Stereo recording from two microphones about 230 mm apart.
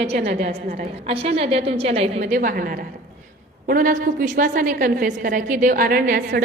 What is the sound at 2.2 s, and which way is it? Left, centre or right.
A woman's voice, right.